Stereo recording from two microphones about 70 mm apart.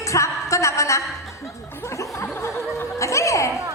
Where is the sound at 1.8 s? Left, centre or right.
Left.